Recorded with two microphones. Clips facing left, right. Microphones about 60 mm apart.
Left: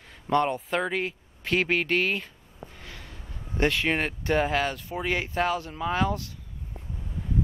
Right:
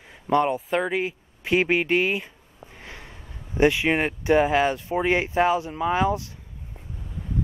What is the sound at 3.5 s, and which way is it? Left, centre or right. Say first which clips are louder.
Speech: right 5 dB; centre.